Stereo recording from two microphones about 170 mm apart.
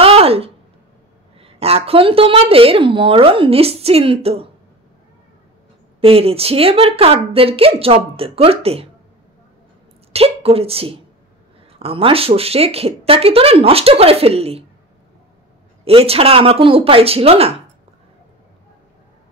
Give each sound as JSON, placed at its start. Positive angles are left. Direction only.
{"t": 0.0, "sound": "a sound", "side_deg": -35}
{"t": 1.4, "sound": "a woman's voice", "side_deg": -35}
{"t": 5.9, "sound": "a woman's voice", "side_deg": -35}
{"t": 10.1, "sound": "a woman's voice", "side_deg": -35}
{"t": 15.8, "sound": "a woman's voice", "side_deg": -35}